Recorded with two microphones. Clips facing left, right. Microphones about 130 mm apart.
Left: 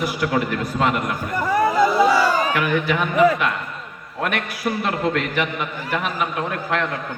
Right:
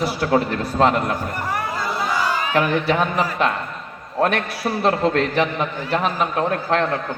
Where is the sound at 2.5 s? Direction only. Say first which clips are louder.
Right 2 dB; 35° right (ahead or behind).